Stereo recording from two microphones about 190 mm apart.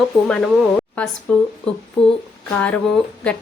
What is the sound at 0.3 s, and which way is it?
A woman's voice, 5° left (ahead or behind).